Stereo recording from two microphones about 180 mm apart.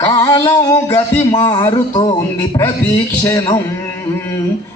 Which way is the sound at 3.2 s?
20° left (ahead or behind).